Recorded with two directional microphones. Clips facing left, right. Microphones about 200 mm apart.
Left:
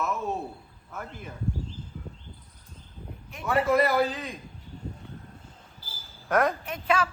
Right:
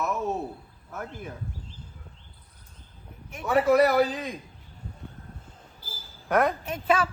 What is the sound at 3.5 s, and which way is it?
Speech, centre (ahead or behind).